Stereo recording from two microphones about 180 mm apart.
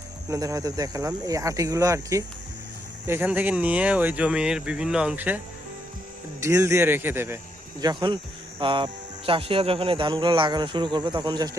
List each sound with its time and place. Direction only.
0.3 s speech: 20° right (ahead or behind)
6.4 s speech: 15° right (ahead or behind)
7.8 s speech: 25° right (ahead or behind)